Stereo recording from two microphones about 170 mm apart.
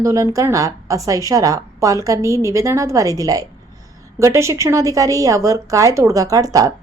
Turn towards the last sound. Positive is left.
turn(degrees=-20)  # may be behind; listen again after turning